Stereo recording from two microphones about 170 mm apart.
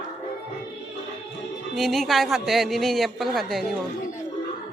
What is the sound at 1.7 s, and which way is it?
A man's voice, centre (ahead or behind).